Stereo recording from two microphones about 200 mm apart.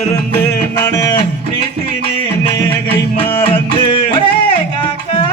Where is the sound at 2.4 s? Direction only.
25° left (ahead or behind).